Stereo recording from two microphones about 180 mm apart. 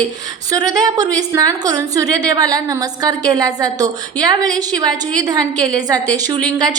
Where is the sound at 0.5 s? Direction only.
20° right (ahead or behind).